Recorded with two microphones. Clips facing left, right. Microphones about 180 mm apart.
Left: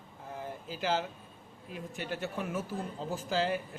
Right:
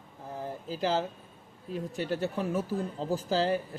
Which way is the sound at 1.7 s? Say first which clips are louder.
Right 6 dB; 40° right (ahead or behind).